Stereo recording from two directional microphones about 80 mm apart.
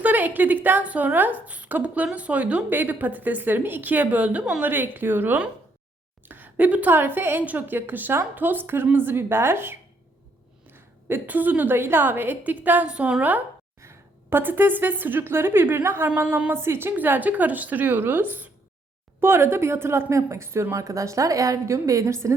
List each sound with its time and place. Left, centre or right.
0.0 s a woman's voice: right
10.8 s a woman's voice: right
13.8 s a woman's voice: right